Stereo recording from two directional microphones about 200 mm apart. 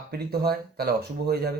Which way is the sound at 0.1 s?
50° right (ahead or behind).